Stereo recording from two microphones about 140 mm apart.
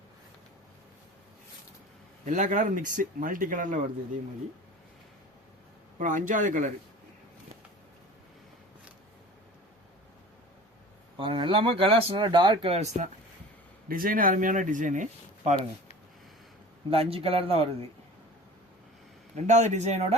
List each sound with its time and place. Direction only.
2.2 s speech: 60° right (ahead or behind)
6.0 s speech: 65° right (ahead or behind)
11.2 s speech: 40° right (ahead or behind)
13.8 s speech: 90° right; by 15.5 s 60° right (ahead or behind)
16.9 s a man's voice: 40° right (ahead or behind)
19.5 s speech: 55° right (ahead or behind)